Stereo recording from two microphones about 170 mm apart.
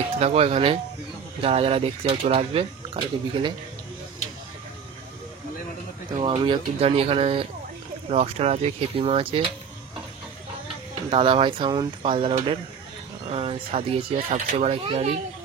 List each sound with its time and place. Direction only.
0.2 s speech: 35° right (ahead or behind)
6.2 s speech: 30° right (ahead or behind)
11.1 s speech: 35° right (ahead or behind)